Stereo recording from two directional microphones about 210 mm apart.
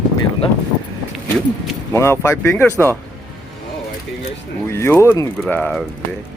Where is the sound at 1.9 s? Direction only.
10° left (ahead or behind).